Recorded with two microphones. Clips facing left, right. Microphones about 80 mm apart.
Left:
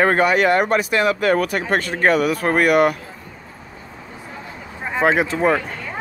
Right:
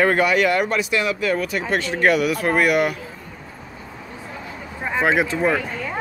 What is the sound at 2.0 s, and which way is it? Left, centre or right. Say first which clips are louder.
Speech: left 1 dB; left.